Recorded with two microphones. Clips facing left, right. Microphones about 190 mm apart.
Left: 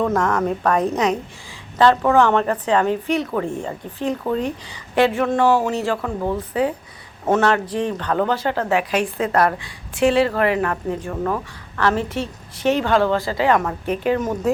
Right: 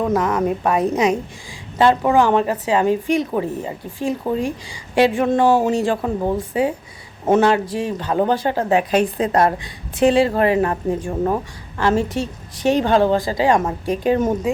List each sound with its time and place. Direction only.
0.0 s a woman's voice: 5° right (ahead or behind)
8.7 s a woman's voice: 35° right (ahead or behind)